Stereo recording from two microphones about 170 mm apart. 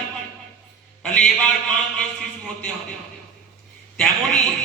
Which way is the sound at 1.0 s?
5° left (ahead or behind).